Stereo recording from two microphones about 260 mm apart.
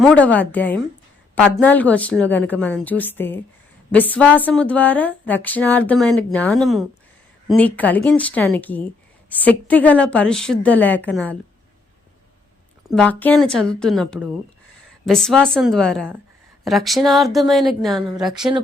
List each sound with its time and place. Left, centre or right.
0.0 s a woman's voice: centre
12.9 s speech: centre
18.3 s speech: centre